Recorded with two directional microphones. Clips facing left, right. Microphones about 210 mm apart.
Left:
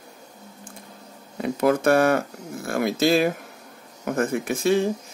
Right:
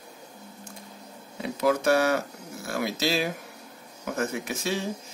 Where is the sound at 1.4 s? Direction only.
55° left (ahead or behind).